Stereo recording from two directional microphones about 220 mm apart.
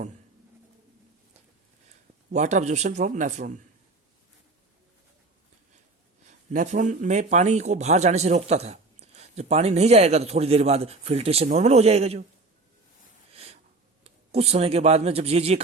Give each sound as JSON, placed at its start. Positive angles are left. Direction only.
{"t": 2.3, "sound": "speech", "side_deg": -35}
{"t": 6.2, "sound": "speech", "side_deg": -35}
{"t": 13.3, "sound": "snort", "side_deg": -30}
{"t": 14.0, "sound": "speech", "side_deg": -30}